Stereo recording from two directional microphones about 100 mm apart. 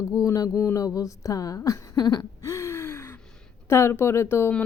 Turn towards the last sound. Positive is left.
turn(degrees=20)  # may be behind; listen again after turning